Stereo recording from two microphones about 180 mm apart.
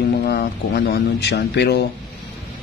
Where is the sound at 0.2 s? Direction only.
60° left (ahead or behind).